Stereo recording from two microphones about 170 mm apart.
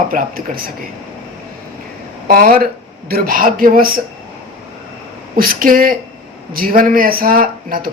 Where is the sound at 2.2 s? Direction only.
60° right (ahead or behind).